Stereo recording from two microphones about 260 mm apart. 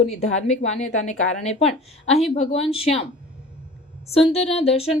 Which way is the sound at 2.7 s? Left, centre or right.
Left.